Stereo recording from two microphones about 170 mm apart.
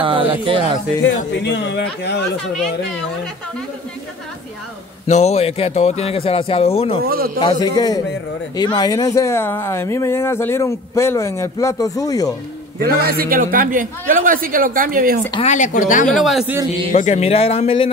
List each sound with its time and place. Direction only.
0.0 s speech: 30° right (ahead or behind)
1.0 s speech: 90° left
5.0 s speech: 40° left (ahead or behind)
7.1 s a man's voice: 60° right (ahead or behind)
7.3 s a man's voice: 25° left (ahead or behind)
12.8 s a man's voice: 65° right (ahead or behind)
15.4 s speech: 45° left (ahead or behind)
16.1 s speech: centre (ahead or behind)
16.9 s speech: 40° left (ahead or behind)